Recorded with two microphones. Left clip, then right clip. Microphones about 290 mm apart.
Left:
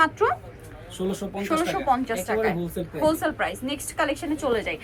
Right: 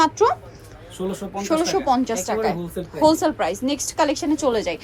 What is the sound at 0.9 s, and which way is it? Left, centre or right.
Speech, centre.